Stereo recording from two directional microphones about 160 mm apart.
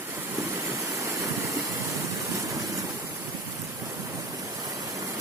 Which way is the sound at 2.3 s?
20° right (ahead or behind).